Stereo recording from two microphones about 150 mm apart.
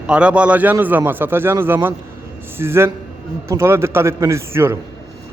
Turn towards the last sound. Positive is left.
turn(degrees=-15)  # may be behind; listen again after turning